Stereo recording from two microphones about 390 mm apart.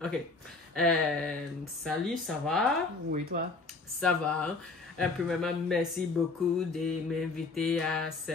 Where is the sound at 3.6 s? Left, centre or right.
Centre.